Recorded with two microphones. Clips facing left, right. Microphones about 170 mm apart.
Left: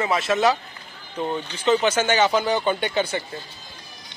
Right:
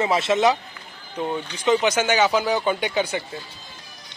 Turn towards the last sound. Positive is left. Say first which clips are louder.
# even
turn(degrees=-10)  # may be behind; listen again after turning